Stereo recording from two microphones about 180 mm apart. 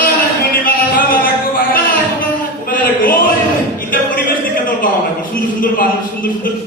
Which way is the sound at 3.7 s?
50° left (ahead or behind).